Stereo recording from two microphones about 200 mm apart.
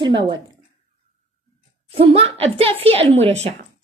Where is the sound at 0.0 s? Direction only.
25° right (ahead or behind).